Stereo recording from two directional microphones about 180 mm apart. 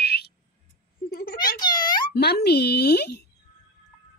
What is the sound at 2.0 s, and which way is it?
Speech, 65° left (ahead or behind).